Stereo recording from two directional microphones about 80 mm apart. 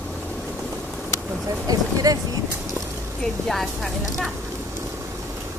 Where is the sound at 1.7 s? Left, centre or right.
Right.